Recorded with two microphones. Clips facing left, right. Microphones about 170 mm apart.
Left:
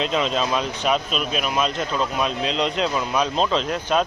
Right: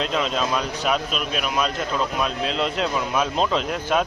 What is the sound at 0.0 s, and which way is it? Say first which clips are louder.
Speech: left 1 dB; centre (ahead or behind).